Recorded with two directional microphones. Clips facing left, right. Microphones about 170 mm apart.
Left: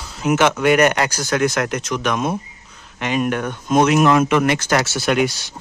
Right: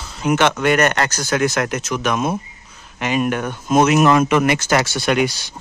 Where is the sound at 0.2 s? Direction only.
5° left (ahead or behind).